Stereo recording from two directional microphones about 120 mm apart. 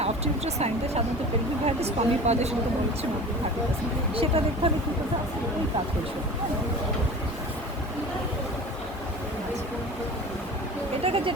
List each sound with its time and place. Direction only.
0.0 s speech: 65° right (ahead or behind)
4.1 s speech: 50° right (ahead or behind)
11.0 s speech: 50° right (ahead or behind)